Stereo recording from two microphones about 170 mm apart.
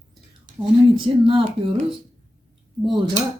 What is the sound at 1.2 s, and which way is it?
Speech, 35° right (ahead or behind).